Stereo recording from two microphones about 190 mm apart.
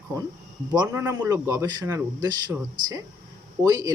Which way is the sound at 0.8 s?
15° right (ahead or behind).